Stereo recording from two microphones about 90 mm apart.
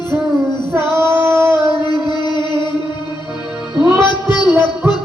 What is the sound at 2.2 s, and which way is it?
Music, 55° left (ahead or behind).